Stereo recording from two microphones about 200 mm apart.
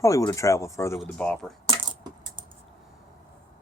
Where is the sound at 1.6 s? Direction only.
25° right (ahead or behind).